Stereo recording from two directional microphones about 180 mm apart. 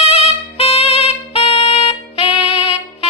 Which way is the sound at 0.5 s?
30° left (ahead or behind).